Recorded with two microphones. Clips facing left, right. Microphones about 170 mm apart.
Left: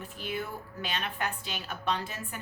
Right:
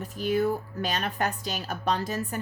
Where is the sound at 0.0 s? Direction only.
40° right (ahead or behind).